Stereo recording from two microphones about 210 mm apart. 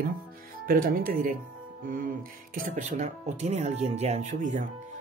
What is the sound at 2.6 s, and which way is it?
Speech, 35° right (ahead or behind).